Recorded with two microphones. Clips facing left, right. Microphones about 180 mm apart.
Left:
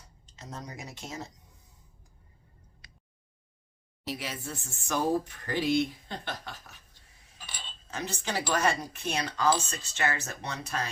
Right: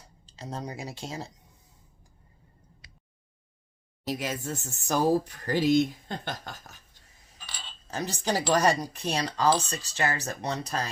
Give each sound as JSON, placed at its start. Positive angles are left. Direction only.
{"t": 0.3, "sound": "speech", "side_deg": -30}
{"t": 4.0, "sound": "speech", "side_deg": -45}
{"t": 7.9, "sound": "speech", "side_deg": -35}